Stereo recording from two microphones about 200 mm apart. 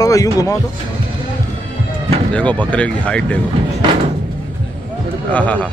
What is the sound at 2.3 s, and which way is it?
Speech, 5° left (ahead or behind).